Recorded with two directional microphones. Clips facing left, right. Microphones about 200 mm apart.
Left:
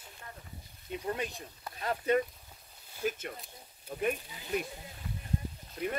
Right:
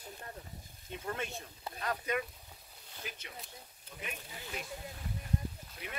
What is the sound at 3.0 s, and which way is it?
Speech, 50° left (ahead or behind).